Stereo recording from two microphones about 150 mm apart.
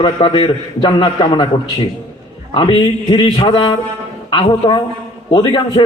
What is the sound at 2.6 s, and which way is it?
A man's voice, 35° left (ahead or behind).